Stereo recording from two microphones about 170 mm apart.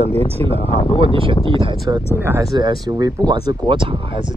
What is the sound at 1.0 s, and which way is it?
Speech, 30° right (ahead or behind).